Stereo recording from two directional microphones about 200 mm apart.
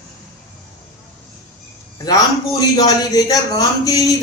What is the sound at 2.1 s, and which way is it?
A man's voice, 20° left (ahead or behind).